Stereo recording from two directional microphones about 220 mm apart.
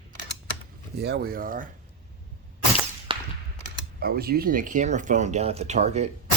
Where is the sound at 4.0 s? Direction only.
45° right (ahead or behind).